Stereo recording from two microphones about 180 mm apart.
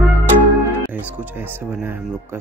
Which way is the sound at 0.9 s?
10° right (ahead or behind).